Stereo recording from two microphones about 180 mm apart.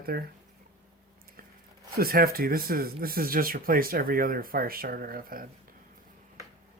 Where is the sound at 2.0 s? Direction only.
55° right (ahead or behind).